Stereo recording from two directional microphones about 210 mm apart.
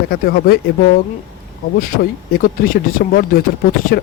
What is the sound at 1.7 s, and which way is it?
Speech, 40° left (ahead or behind).